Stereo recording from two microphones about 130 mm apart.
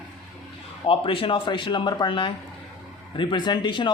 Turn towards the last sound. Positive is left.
turn(degrees=35)  # may be behind; listen again after turning